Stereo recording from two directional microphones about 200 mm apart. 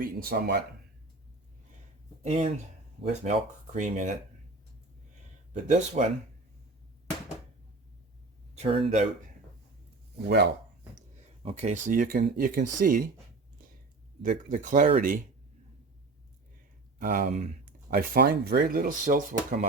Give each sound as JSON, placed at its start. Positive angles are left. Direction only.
{"t": 0.0, "sound": "speech", "side_deg": -50}
{"t": 2.2, "sound": "speech", "side_deg": -30}
{"t": 3.8, "sound": "speech", "side_deg": -40}
{"t": 5.6, "sound": "speech", "side_deg": -40}
{"t": 8.5, "sound": "speech", "side_deg": -30}
{"t": 10.2, "sound": "speech", "side_deg": -55}
{"t": 11.4, "sound": "speech", "side_deg": -35}
{"t": 14.2, "sound": "speech", "side_deg": -40}
{"t": 17.0, "sound": "speech", "side_deg": -40}
{"t": 17.9, "sound": "speech", "side_deg": -50}